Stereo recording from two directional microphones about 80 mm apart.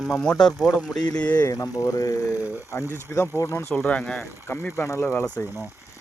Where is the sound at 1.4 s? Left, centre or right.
Left.